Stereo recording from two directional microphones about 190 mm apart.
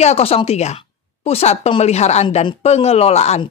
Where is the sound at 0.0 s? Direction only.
35° left (ahead or behind).